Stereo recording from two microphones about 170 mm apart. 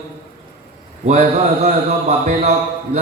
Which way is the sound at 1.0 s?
40° right (ahead or behind).